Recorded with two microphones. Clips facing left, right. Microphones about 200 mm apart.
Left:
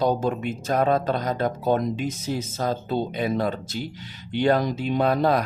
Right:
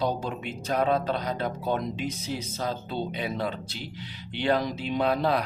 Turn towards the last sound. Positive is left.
turn(degrees=45)  # may be behind; listen again after turning